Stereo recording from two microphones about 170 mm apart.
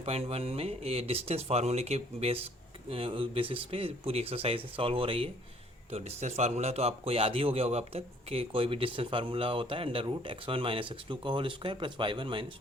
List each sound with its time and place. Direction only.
0.0 s a man's voice: 35° right (ahead or behind)